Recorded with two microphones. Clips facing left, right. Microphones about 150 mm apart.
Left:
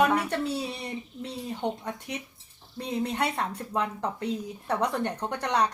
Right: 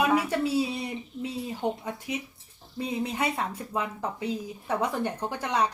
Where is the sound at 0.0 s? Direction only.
5° right (ahead or behind).